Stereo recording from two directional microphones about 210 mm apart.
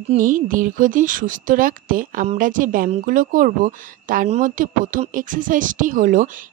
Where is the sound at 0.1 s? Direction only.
40° right (ahead or behind).